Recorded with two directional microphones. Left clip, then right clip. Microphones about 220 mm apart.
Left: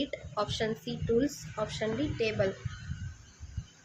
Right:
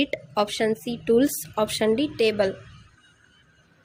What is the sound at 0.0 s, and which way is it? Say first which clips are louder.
A woman's voice: right 9 dB; 35° right (ahead or behind).